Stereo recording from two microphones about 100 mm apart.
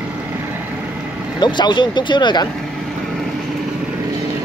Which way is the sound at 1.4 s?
50° left (ahead or behind).